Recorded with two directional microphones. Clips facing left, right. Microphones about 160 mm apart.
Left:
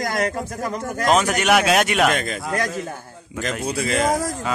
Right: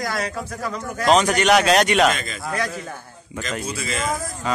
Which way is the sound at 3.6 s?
65° left (ahead or behind).